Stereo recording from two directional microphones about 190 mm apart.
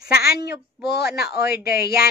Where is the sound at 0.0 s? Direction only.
55° left (ahead or behind).